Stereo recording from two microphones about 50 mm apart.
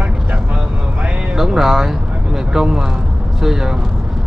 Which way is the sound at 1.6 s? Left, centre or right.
Centre.